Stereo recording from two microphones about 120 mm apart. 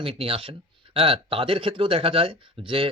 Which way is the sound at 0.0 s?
50° right (ahead or behind).